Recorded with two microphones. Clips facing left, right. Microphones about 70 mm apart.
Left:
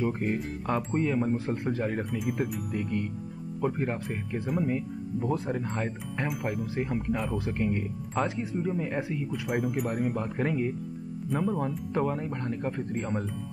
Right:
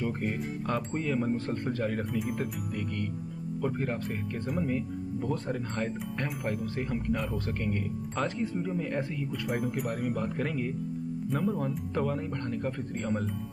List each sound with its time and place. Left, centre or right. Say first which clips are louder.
0.0 s speech: left 3 dB; centre
2.0 s speech: left 1 dB; centre
2.7 s speech: left 3 dB; centre